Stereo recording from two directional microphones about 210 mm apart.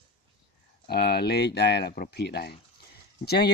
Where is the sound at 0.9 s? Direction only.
50° left (ahead or behind).